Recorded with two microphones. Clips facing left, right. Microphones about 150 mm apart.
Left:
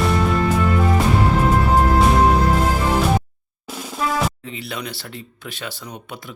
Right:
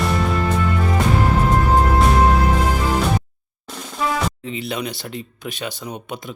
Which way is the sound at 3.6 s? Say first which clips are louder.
Even; 5° left (ahead or behind).